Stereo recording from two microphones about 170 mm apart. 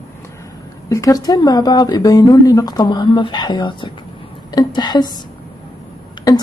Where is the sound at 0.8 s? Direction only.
20° left (ahead or behind).